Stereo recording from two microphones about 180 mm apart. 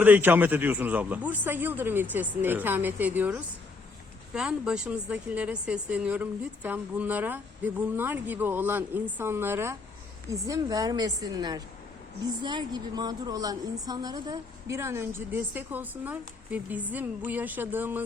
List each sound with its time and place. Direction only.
0.0 s a woman's voice: 10° right (ahead or behind)